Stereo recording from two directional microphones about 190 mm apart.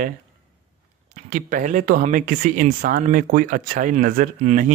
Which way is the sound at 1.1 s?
40° right (ahead or behind).